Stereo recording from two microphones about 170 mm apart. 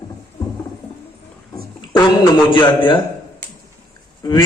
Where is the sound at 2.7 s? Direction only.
30° left (ahead or behind).